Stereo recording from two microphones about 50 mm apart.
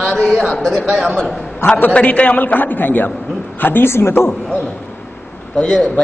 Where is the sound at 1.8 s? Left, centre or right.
Left.